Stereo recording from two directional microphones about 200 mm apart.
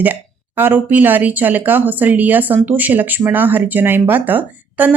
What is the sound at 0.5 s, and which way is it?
Speech, 10° right (ahead or behind).